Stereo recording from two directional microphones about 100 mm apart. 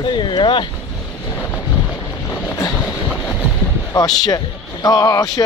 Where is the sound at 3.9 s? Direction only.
40° left (ahead or behind).